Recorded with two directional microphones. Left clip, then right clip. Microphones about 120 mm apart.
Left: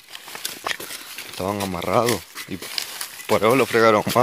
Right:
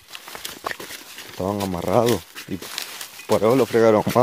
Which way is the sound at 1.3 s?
10° right (ahead or behind).